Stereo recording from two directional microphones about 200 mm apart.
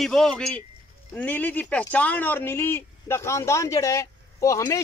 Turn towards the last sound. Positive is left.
turn(degrees=15)  # may be behind; listen again after turning